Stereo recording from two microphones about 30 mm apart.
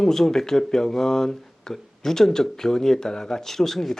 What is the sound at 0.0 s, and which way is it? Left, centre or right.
Speech, centre.